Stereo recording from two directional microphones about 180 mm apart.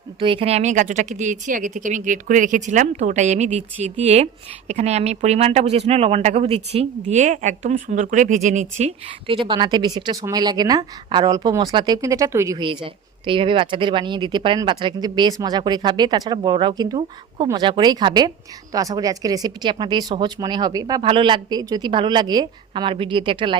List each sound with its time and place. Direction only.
0.2 s speech: 30° right (ahead or behind)
9.2 s speech: 30° right (ahead or behind)
12.5 s speech: 25° right (ahead or behind)